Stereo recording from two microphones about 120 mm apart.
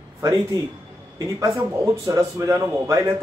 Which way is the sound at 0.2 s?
30° right (ahead or behind).